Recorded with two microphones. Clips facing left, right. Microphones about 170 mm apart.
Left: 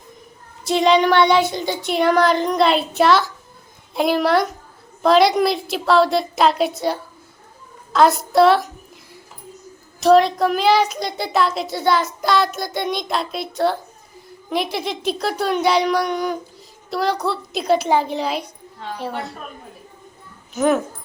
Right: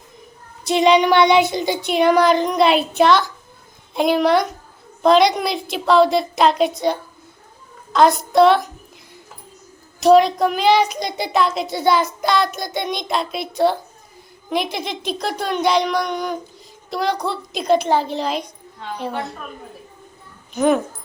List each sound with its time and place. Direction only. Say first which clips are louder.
0.9 s child singing: right 1 dB; 15° right (ahead or behind)
3.0 s a woman's voice: even; 5° left (ahead or behind)
10.0 s a woman's voice: right 1 dB; centre (ahead or behind)
20.5 s a woman's voice: right 1 dB; 5° left (ahead or behind)